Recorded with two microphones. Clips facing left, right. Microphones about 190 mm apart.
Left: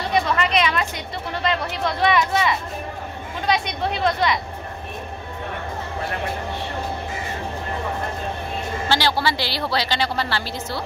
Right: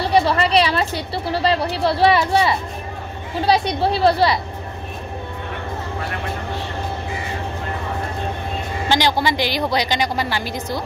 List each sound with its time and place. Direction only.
0.0 s speech: 35° right (ahead or behind)
8.8 s a woman's voice: 15° right (ahead or behind)